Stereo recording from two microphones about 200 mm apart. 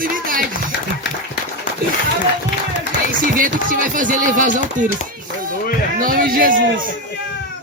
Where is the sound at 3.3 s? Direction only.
45° right (ahead or behind).